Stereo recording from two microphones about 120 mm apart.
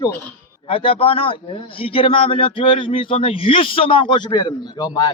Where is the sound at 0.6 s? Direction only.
50° left (ahead or behind).